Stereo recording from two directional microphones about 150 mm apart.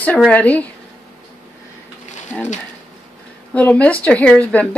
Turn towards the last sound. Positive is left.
turn(degrees=10)  # may be behind; listen again after turning